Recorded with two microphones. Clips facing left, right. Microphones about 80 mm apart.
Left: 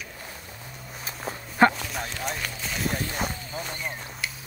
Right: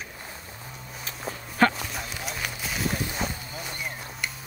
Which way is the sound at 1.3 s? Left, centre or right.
Left.